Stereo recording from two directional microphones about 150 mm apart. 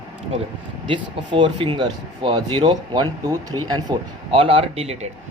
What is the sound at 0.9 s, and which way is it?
Speech, 30° right (ahead or behind).